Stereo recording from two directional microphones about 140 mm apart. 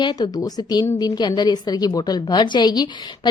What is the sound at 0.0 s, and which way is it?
A woman's voice, 30° left (ahead or behind).